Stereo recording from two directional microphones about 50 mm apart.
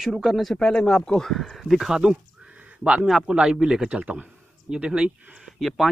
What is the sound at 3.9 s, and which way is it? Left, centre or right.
Speech, right.